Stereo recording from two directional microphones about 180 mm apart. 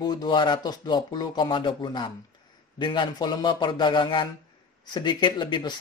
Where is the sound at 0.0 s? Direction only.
25° left (ahead or behind).